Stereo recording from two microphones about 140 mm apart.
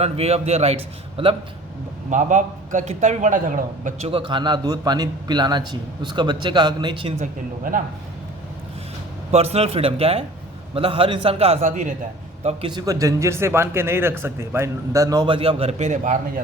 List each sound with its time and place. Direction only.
0.0 s a man's voice: 45° right (ahead or behind)
2.0 s a man's voice: 60° right (ahead or behind)
4.0 s a man's voice: 40° right (ahead or behind)
7.2 s speech: 75° right (ahead or behind)
9.3 s a man's voice: 50° right (ahead or behind)
11.6 s a man's voice: 65° right (ahead or behind)
12.4 s a man's voice: 50° right (ahead or behind)
12.7 s a man's voice: 25° right (ahead or behind)
15.4 s a man's voice: 45° right (ahead or behind); by 16.4 s 60° right (ahead or behind)